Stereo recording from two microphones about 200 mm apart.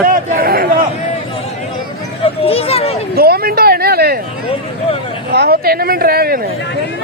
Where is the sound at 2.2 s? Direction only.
30° left (ahead or behind).